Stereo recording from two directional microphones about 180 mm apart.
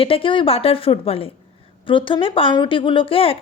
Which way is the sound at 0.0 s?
30° left (ahead or behind).